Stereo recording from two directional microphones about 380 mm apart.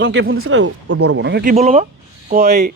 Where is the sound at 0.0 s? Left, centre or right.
Right.